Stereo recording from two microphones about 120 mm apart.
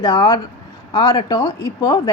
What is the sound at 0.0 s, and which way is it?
A woman's voice, 35° left (ahead or behind).